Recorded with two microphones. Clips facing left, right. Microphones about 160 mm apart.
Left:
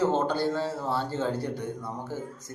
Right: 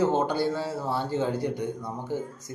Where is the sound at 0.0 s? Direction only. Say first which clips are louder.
Right 1 dB; 10° right (ahead or behind).